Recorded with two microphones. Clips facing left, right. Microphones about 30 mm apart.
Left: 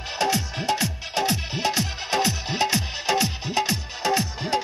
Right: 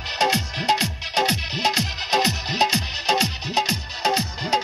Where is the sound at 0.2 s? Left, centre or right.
Right.